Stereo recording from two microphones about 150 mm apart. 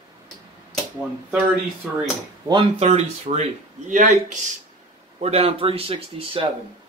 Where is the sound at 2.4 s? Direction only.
30° right (ahead or behind).